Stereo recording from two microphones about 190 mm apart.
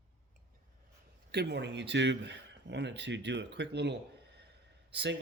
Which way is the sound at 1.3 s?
60° right (ahead or behind).